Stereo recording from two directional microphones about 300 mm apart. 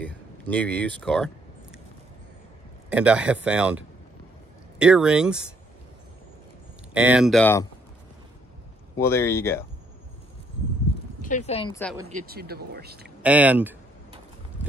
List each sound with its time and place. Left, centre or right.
0.0 s a sound: centre
2.9 s speech: centre
6.9 s speech: centre
8.9 s speech: centre
11.2 s speech: left
12.1 s speech: right
13.2 s speech: centre
14.6 s a sound: left